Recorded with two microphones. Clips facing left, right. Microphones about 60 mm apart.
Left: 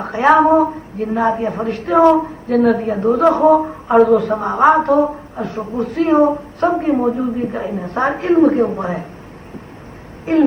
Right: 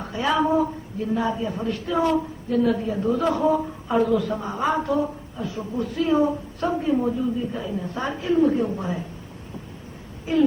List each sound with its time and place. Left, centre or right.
0.0 s a woman's voice: left
10.3 s a woman's voice: left